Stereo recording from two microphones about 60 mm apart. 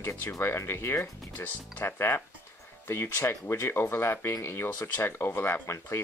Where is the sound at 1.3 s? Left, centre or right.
Left.